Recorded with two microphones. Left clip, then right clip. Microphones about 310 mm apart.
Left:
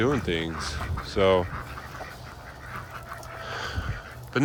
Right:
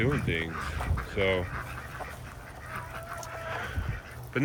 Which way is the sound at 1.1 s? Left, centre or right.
Centre.